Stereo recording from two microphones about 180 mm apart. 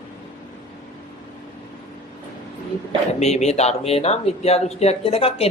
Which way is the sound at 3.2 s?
35° left (ahead or behind).